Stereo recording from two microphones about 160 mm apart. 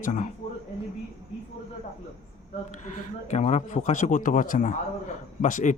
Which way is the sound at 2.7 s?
50° left (ahead or behind).